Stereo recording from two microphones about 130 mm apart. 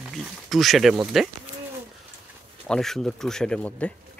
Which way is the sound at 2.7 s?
5° left (ahead or behind).